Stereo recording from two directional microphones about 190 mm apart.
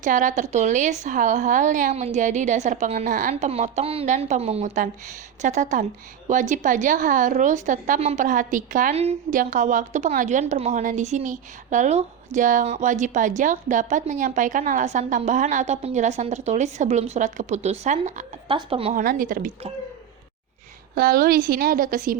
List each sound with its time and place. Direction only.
0.0 s a woman's voice: 40° right (ahead or behind)
19.0 s a woman's voice: 45° right (ahead or behind)
20.9 s a woman's voice: 50° right (ahead or behind)